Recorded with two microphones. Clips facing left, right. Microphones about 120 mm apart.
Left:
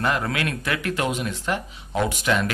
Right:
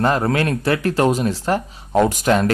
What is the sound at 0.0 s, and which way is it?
Speech, 35° right (ahead or behind).